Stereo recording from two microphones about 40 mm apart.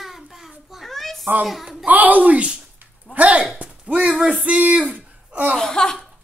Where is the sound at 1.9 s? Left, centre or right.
Right.